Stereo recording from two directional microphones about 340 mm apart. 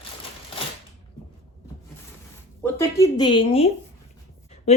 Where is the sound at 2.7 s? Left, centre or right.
Centre.